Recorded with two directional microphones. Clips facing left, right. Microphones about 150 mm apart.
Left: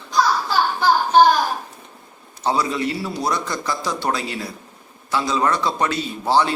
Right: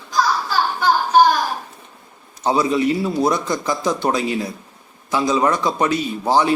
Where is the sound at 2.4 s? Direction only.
20° right (ahead or behind).